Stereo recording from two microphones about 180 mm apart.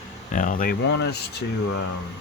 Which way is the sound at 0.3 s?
50° left (ahead or behind).